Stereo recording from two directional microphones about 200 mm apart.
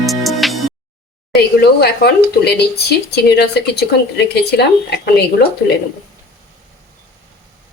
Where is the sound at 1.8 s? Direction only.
55° left (ahead or behind).